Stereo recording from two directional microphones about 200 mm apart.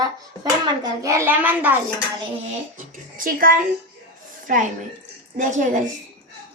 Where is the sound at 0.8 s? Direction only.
15° right (ahead or behind).